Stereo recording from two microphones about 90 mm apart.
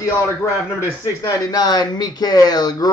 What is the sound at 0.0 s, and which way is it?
Speech, 30° left (ahead or behind).